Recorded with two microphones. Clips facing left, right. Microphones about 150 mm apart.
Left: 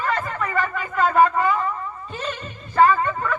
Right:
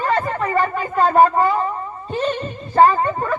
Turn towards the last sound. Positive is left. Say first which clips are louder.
# right 2 dB
turn(degrees=-35)  # may be behind; listen again after turning